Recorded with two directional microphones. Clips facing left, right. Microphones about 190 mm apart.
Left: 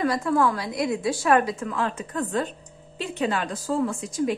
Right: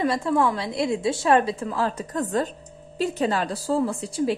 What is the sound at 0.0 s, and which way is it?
A woman's voice, 25° right (ahead or behind).